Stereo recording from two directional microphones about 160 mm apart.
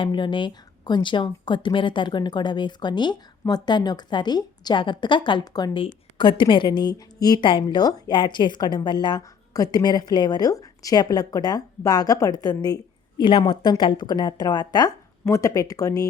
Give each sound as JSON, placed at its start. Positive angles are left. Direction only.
{"t": 0.0, "sound": "speech", "side_deg": 30}